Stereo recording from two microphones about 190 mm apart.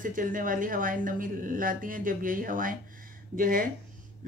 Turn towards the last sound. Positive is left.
turn(degrees=-45)  # may be behind; listen again after turning